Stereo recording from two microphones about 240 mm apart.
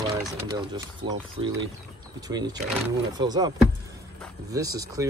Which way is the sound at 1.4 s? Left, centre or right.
Right.